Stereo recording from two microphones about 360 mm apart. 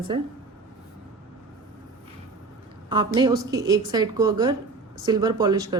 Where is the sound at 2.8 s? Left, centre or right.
Centre.